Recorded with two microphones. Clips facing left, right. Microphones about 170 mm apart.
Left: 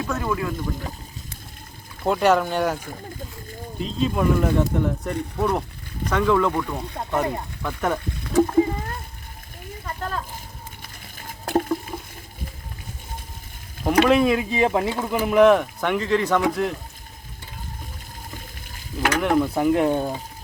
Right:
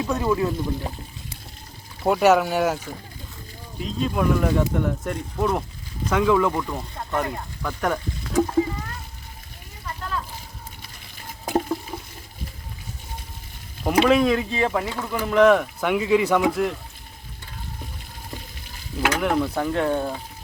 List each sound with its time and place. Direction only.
0.0 s speech: 20° right (ahead or behind)
2.0 s speech: 5° right (ahead or behind)
3.8 s speech: centre (ahead or behind)
7.1 s speech: 10° left (ahead or behind)
9.8 s a sound: 45° left (ahead or behind)
11.5 s a sound: 5° right (ahead or behind)
13.8 s speech: centre (ahead or behind)
14.6 s speech: 20° left (ahead or behind)
15.4 s speech: centre (ahead or behind)
18.9 s speech: 5° right (ahead or behind); by 20.2 s 15° left (ahead or behind)